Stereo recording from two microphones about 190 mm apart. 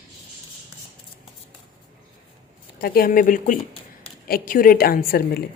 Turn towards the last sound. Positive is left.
turn(degrees=50)  # may be behind; listen again after turning